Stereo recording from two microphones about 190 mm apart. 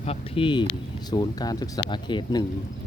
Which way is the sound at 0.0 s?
30° left (ahead or behind).